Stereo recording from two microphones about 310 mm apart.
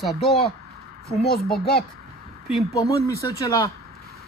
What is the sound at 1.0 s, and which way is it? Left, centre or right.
Speech, left.